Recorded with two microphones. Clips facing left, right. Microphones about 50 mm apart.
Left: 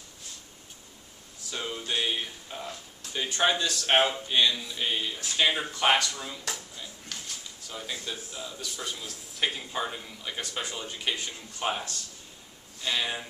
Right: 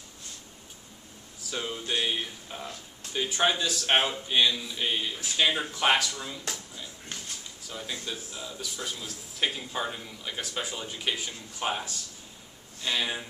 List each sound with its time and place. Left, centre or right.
1.5 s speech: centre
7.1 s drawer open or close: right
7.6 s speech: centre